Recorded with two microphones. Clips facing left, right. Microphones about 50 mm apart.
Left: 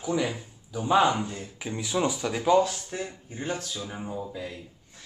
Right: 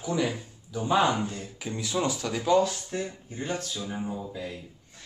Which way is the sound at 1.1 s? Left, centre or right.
Left.